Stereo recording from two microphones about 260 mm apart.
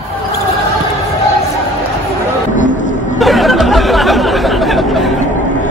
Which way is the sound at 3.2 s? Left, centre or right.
Centre.